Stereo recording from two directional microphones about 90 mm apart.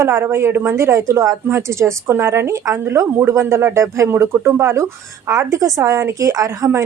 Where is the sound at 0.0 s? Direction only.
30° right (ahead or behind).